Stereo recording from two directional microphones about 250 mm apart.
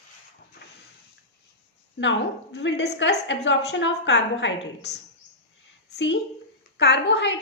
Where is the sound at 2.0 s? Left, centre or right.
Left.